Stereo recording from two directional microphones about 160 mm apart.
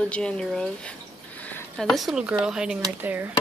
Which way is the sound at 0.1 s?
5° left (ahead or behind).